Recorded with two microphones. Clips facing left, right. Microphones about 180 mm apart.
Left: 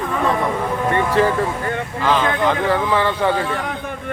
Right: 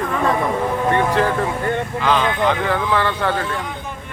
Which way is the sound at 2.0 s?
5° left (ahead or behind).